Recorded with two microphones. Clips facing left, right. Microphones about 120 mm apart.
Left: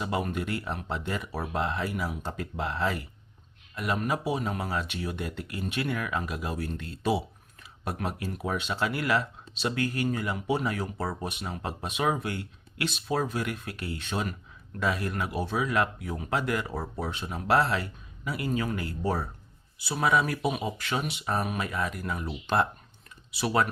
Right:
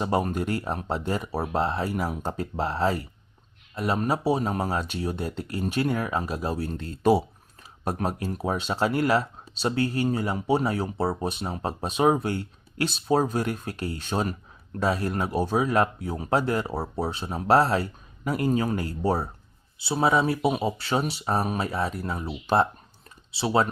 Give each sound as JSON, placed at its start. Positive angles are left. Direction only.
{"t": 0.0, "sound": "speech", "side_deg": -40}